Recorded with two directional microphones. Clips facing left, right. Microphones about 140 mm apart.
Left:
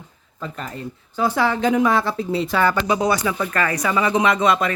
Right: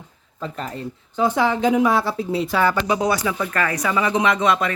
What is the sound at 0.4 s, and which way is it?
Speech, 30° right (ahead or behind).